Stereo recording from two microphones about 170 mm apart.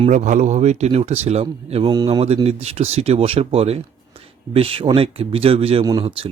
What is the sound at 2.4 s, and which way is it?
Speech, 35° right (ahead or behind).